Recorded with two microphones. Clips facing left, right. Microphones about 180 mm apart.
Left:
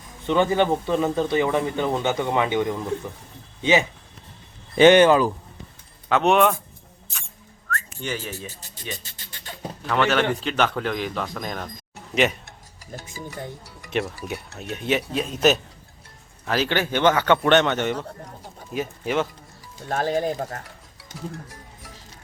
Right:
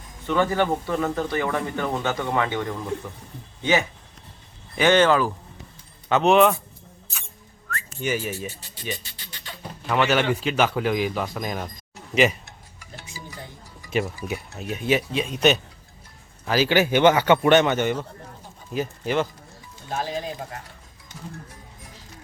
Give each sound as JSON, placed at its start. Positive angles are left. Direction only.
{"t": 0.3, "sound": "speech", "side_deg": 20}
{"t": 6.1, "sound": "speech", "side_deg": 0}
{"t": 8.0, "sound": "a man's voice", "side_deg": -10}
{"t": 9.1, "sound": "a sound", "side_deg": 45}
{"t": 9.9, "sound": "a man's voice", "side_deg": -5}
{"t": 12.8, "sound": "speech", "side_deg": 45}
{"t": 14.3, "sound": "a man's voice", "side_deg": 0}
{"t": 19.9, "sound": "speech", "side_deg": 55}